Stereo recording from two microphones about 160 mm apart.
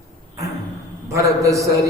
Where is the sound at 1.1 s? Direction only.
20° right (ahead or behind).